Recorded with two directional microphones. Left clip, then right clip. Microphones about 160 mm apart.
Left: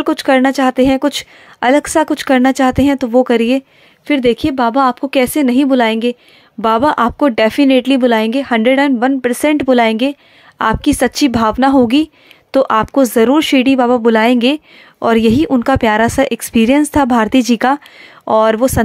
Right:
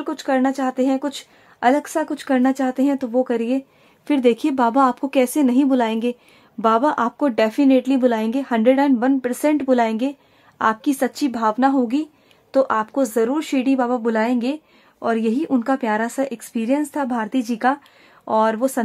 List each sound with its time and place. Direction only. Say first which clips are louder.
0.0 s a woman's voice: left 9 dB; 30° left (ahead or behind)
4.1 s a woman's voice: left 5 dB; 15° left (ahead or behind); by 18.7 s 30° left (ahead or behind)